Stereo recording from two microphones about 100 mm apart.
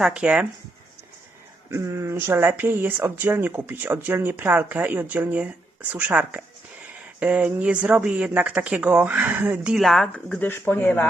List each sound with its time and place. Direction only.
0.0 s speech: 5° right (ahead or behind)
1.7 s speech: 30° right (ahead or behind)
9.7 s speech: centre (ahead or behind)
10.4 s speech: 20° left (ahead or behind)